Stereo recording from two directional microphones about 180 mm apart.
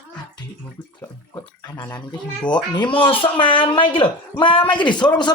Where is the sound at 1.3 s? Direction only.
15° left (ahead or behind).